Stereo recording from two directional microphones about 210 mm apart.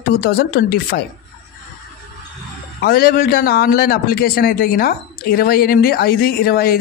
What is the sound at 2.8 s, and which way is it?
Speech, 45° left (ahead or behind).